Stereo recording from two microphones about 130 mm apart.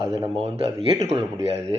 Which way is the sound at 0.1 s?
50° right (ahead or behind).